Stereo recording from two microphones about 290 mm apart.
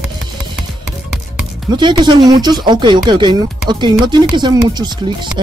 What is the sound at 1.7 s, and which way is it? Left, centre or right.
Speech, centre.